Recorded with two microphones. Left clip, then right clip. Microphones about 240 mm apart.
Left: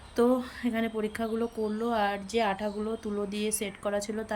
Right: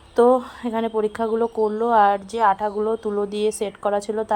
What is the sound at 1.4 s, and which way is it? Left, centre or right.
Speech, right.